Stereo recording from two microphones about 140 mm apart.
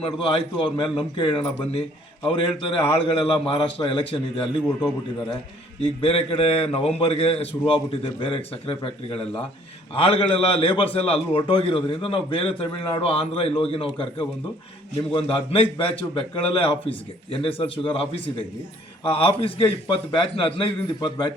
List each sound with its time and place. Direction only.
0.0 s a man's voice: 40° left (ahead or behind)
6.0 s a man's voice: 45° left (ahead or behind)